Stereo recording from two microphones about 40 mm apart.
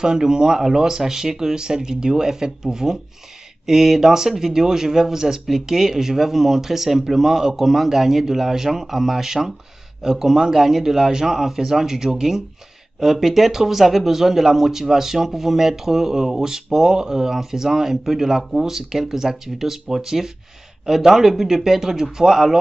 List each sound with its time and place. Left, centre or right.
0.0 s speech: centre